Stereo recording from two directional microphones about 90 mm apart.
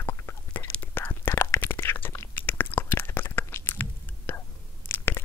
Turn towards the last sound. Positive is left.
turn(degrees=25)  # may be behind; listen again after turning